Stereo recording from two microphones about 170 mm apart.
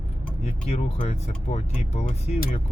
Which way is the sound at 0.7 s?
40° left (ahead or behind).